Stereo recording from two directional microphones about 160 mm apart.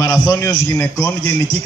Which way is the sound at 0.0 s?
25° left (ahead or behind).